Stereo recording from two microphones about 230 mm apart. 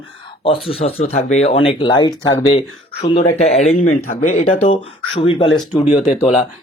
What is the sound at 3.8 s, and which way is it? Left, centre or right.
Speech, left.